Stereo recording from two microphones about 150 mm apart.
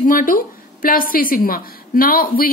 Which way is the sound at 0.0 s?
65° left (ahead or behind).